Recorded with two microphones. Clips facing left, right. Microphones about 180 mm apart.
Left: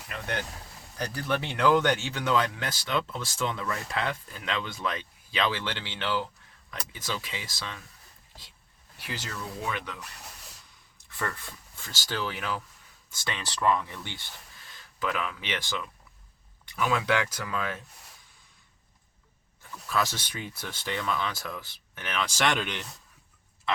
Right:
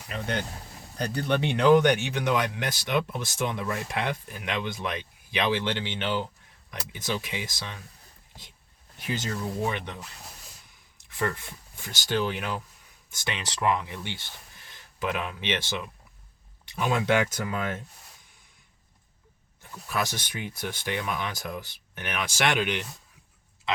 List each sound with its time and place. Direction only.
0.1 s speech: 20° right (ahead or behind)
9.0 s speech: 20° right (ahead or behind)
11.2 s speech: 20° right (ahead or behind)
19.9 s speech: 15° right (ahead or behind)